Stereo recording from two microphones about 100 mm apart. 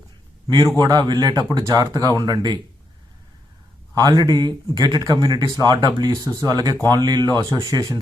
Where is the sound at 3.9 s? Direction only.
40° right (ahead or behind).